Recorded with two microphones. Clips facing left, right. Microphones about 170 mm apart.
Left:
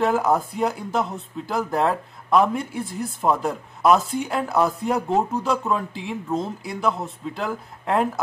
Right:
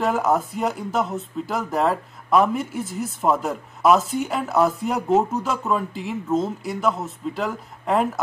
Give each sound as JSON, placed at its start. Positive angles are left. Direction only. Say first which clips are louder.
{"t": 0.0, "sound": "speech", "louder": "left 1 dB", "side_deg": 0}